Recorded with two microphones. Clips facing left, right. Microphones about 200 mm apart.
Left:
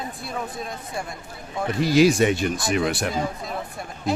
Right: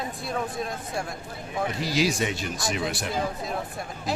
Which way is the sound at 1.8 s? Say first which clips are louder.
Left 10 dB; 55° left (ahead or behind).